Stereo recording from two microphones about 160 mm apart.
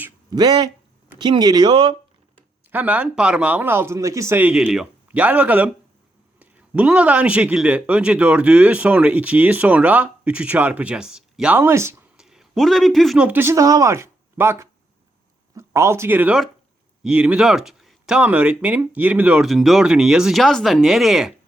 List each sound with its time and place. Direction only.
0.3 s speech: 25° right (ahead or behind)
2.7 s speech: 10° right (ahead or behind)
12.1 s a man's voice: 5° right (ahead or behind)